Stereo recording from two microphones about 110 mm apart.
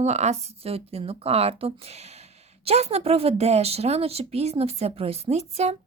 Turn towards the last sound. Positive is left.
turn(degrees=-80)